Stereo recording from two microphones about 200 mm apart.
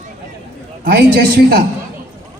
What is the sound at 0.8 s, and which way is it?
Speech, 50° right (ahead or behind).